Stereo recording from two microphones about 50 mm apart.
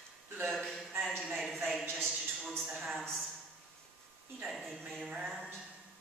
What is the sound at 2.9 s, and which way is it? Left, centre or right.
Speech, centre.